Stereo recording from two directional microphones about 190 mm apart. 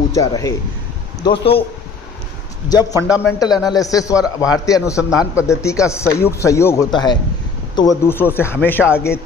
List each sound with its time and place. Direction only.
0.1 s a man's voice: 15° left (ahead or behind)
1.2 s speech: 30° left (ahead or behind)
2.7 s a man's voice: 20° left (ahead or behind)